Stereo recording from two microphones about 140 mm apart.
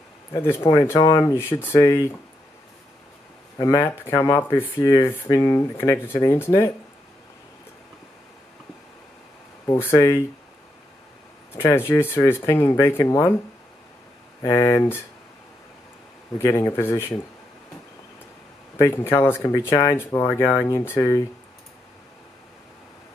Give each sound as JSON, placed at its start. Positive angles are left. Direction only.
{"t": 0.3, "sound": "speech", "side_deg": 20}
{"t": 3.5, "sound": "speech", "side_deg": 25}
{"t": 9.9, "sound": "speech", "side_deg": 20}
{"t": 11.5, "sound": "speech", "side_deg": 15}
{"t": 14.4, "sound": "speech", "side_deg": 20}
{"t": 16.4, "sound": "speech", "side_deg": 20}
{"t": 18.8, "sound": "speech", "side_deg": 20}